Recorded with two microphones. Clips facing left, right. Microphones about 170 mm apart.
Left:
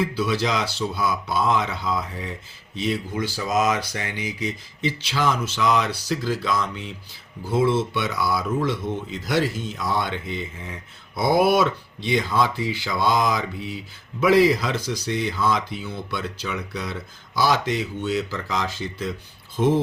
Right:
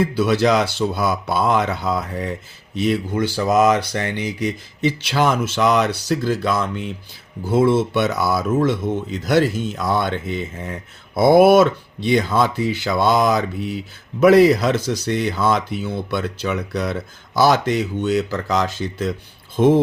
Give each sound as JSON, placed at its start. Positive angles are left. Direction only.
{"t": 0.0, "sound": "speech", "side_deg": -60}
{"t": 9.2, "sound": "speech", "side_deg": -65}
{"t": 19.5, "sound": "speech", "side_deg": -55}